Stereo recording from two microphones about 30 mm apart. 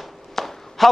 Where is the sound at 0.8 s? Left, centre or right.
Centre.